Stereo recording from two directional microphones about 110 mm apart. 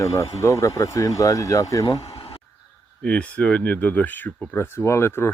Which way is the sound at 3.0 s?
10° left (ahead or behind).